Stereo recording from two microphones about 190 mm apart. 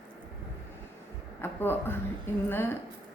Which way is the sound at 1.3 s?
10° left (ahead or behind).